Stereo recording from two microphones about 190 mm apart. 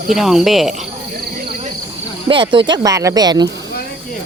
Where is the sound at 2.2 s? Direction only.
25° right (ahead or behind).